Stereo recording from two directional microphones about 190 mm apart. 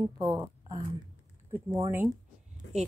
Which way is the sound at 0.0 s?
20° right (ahead or behind).